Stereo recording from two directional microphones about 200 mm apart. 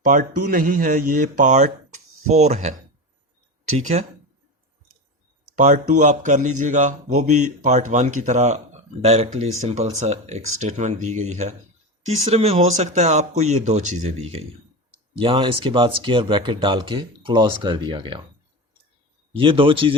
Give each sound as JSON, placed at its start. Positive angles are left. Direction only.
{"t": 0.0, "sound": "speech", "side_deg": -45}
{"t": 3.8, "sound": "speech", "side_deg": -35}
{"t": 5.5, "sound": "speech", "side_deg": -40}
{"t": 19.3, "sound": "speech", "side_deg": -25}